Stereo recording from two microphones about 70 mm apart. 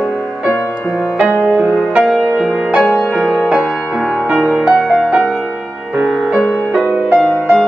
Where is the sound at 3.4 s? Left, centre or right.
Centre.